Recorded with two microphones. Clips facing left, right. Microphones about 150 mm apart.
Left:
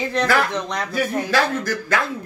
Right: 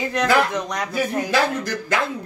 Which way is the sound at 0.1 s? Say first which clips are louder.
Right 2 dB; 15° right (ahead or behind).